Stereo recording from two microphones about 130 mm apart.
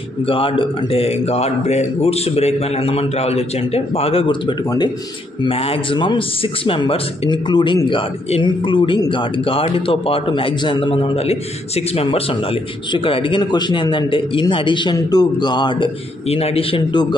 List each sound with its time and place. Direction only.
0.2 s speech: 45° left (ahead or behind)
5.4 s a man's voice: 45° left (ahead or behind)
16.3 s speech: 50° left (ahead or behind)